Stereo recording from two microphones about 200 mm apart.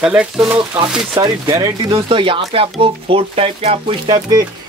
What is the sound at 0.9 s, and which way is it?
Speech, 5° right (ahead or behind).